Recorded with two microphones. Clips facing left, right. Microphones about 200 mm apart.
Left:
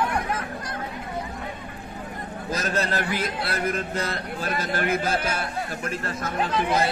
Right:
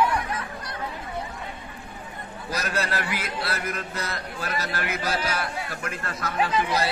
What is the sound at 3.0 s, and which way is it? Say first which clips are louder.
Speech: left 4 dB; 45° left (ahead or behind).